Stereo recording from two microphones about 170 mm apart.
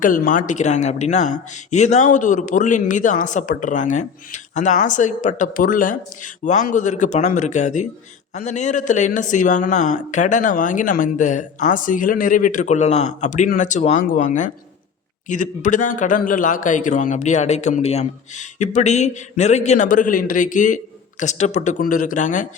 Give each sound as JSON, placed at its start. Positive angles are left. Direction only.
{"t": 0.0, "sound": "a man's voice", "side_deg": 55}